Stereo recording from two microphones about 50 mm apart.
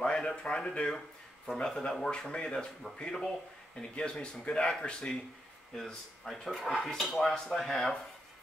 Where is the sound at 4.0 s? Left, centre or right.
Centre.